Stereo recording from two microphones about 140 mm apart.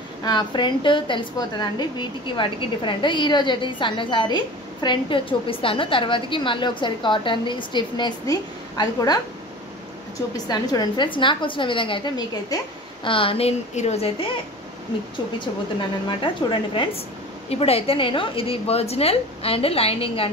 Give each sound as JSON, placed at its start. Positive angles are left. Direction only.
{"t": 0.2, "sound": "a woman's voice", "side_deg": 30}
{"t": 10.3, "sound": "a woman's voice", "side_deg": 30}
{"t": 16.1, "sound": "a woman's voice", "side_deg": 35}